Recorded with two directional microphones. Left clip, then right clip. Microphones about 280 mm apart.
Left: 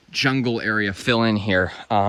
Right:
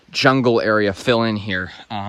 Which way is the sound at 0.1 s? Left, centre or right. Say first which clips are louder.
Right 7 dB; centre.